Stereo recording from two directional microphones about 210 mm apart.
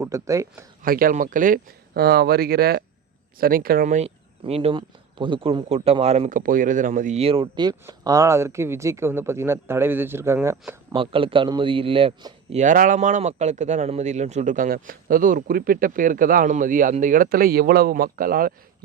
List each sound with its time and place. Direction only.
0.0 s speech: 15° right (ahead or behind)
0.8 s a man's voice: 40° right (ahead or behind); by 10.8 s 10° right (ahead or behind)
10.9 s a man's voice: 25° right (ahead or behind); by 18.5 s 45° right (ahead or behind)